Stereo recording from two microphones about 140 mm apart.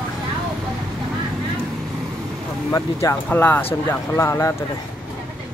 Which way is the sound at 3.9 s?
20° left (ahead or behind).